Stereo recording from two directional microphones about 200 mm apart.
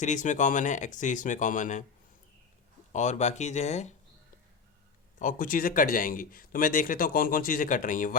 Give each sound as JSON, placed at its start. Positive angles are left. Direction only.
{"t": 0.0, "sound": "speech", "side_deg": 40}
{"t": 2.9, "sound": "speech", "side_deg": 35}
{"t": 5.2, "sound": "speech", "side_deg": 45}